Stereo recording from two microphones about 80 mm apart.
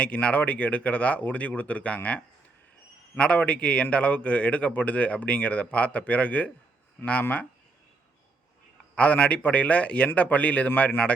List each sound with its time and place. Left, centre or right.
0.0 s a man's voice: centre
9.0 s a man's voice: centre